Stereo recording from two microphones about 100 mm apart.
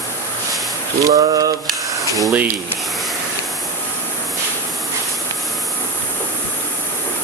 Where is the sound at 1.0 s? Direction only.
35° right (ahead or behind).